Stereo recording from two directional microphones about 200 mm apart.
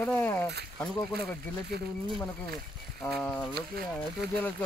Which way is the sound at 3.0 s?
5° left (ahead or behind).